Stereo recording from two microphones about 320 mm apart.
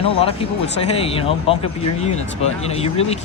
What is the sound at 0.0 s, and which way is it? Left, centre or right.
Speech, centre.